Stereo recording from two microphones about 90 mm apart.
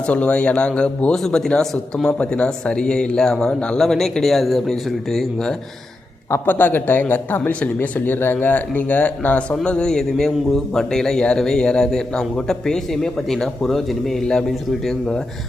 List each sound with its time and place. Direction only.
0.0 s a man's voice: 15° left (ahead or behind)
6.3 s a man's voice: 20° left (ahead or behind); by 15.2 s 5° left (ahead or behind)